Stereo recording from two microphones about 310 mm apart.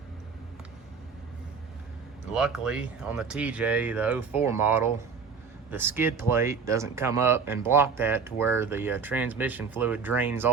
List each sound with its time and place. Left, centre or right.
2.3 s speech: centre